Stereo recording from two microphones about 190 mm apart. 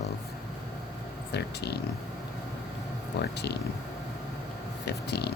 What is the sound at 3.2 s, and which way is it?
Speech, 60° left (ahead or behind).